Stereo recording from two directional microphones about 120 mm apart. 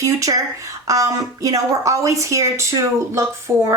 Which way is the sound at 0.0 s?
30° right (ahead or behind).